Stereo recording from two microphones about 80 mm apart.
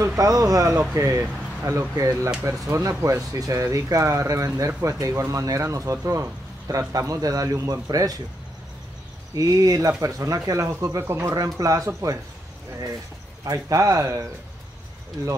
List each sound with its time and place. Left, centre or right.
0.0 s a man's voice: right
9.3 s a man's voice: right
11.3 s a man's voice: right
13.4 s a man's voice: right